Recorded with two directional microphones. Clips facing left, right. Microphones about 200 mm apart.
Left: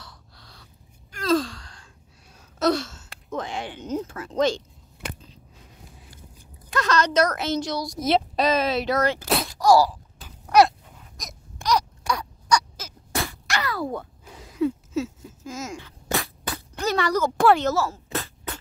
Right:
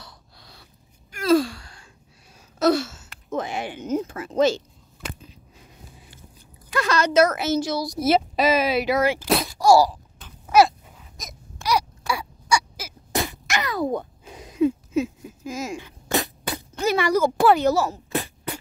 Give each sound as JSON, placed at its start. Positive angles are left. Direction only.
{"t": 0.0, "sound": "gasp", "side_deg": -10}
{"t": 3.3, "sound": "speech", "side_deg": -10}
{"t": 6.7, "sound": "a woman's voice", "side_deg": -10}
{"t": 9.3, "sound": "groan", "side_deg": 0}
{"t": 9.7, "sound": "speech", "side_deg": -10}
{"t": 10.2, "sound": "a sound", "side_deg": 0}